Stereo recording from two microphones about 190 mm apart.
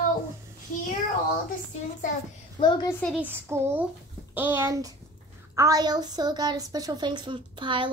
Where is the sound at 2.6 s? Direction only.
25° left (ahead or behind).